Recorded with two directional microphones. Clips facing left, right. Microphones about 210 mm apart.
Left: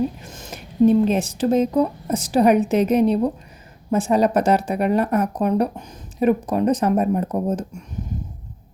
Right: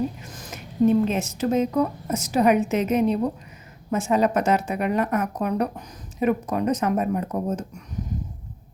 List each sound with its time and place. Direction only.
0.2 s speech: 25° left (ahead or behind)